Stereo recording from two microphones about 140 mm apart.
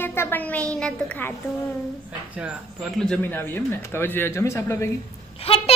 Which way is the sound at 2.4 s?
5° right (ahead or behind).